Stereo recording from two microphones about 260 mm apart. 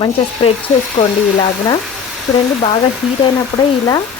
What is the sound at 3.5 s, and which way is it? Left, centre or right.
Speech, centre.